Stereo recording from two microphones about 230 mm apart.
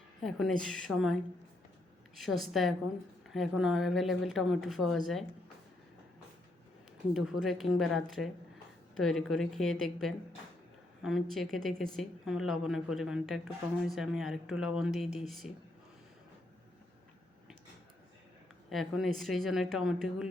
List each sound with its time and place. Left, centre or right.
0.2 s a woman's voice: centre
7.1 s a woman's voice: centre
18.7 s a woman's voice: centre